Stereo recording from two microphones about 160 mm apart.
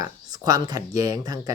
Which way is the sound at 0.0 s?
25° right (ahead or behind).